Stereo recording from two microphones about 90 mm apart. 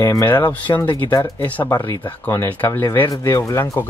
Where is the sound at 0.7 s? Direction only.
40° left (ahead or behind).